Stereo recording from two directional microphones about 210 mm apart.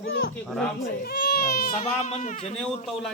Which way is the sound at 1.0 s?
45° left (ahead or behind).